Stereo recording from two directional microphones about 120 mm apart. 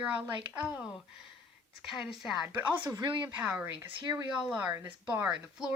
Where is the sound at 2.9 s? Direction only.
40° right (ahead or behind).